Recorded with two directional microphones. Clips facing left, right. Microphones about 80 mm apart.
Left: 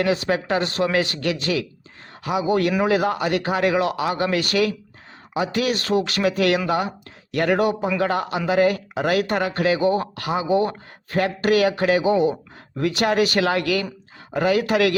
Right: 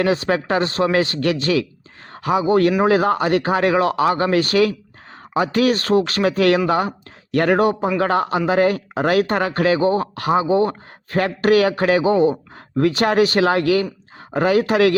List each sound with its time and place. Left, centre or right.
0.0 s speech: right